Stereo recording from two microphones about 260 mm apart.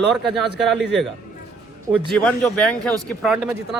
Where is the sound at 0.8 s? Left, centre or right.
Right.